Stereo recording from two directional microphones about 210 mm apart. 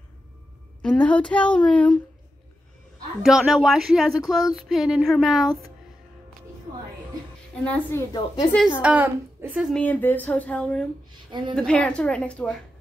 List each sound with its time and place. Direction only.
0.8 s a woman's voice: 5° left (ahead or behind)
3.2 s a woman's voice: centre (ahead or behind)
7.5 s a woman's voice: 5° left (ahead or behind)
8.8 s a woman's voice: 10° right (ahead or behind)
11.1 s a sound: 20° right (ahead or behind)
11.5 s a woman's voice: 5° left (ahead or behind)